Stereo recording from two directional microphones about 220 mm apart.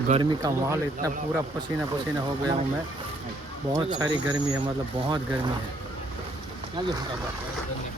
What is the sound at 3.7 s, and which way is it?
Speech, 15° right (ahead or behind).